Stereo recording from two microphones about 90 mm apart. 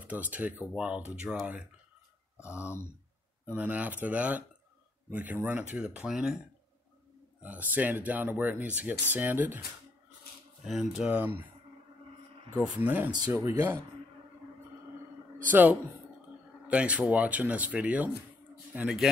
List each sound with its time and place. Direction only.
0.0 s speech: 15° right (ahead or behind)
2.5 s speech: 30° left (ahead or behind)
3.5 s speech: 15° right (ahead or behind)
7.4 s speech: 20° right (ahead or behind)
10.6 s speech: 5° right (ahead or behind)
11.1 s speech: 20° right (ahead or behind)
12.5 s speech: 15° right (ahead or behind)
16.6 s speech: 15° right (ahead or behind)